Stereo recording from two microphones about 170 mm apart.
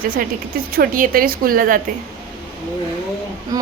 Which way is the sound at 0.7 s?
55° right (ahead or behind).